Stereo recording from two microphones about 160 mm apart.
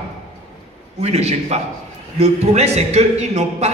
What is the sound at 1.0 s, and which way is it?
A man's voice, 40° right (ahead or behind).